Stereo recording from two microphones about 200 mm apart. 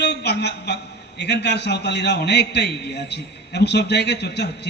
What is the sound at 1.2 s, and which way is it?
A man's voice, 60° left (ahead or behind).